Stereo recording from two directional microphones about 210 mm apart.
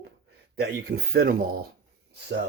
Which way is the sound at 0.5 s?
50° right (ahead or behind).